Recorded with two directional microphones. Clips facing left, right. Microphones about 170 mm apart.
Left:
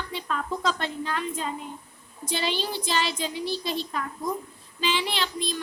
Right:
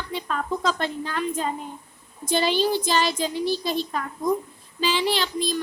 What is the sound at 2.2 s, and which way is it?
A woman's voice, 45° right (ahead or behind).